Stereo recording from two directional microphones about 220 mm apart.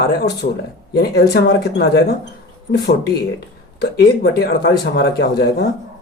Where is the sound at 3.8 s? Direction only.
45° left (ahead or behind).